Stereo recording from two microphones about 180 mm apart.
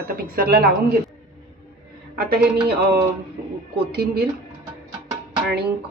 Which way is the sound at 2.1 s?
60° right (ahead or behind).